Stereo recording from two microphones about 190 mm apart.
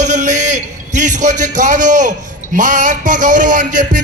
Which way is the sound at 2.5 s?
40° right (ahead or behind).